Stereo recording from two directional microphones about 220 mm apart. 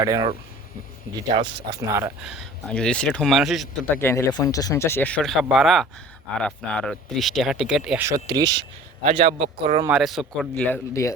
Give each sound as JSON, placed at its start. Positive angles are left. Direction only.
{"t": 0.0, "sound": "speech", "side_deg": -15}
{"t": 1.8, "sound": "speech", "side_deg": -15}
{"t": 2.3, "sound": "speech", "side_deg": 0}
{"t": 3.9, "sound": "speech", "side_deg": 10}
{"t": 9.8, "sound": "speech", "side_deg": -5}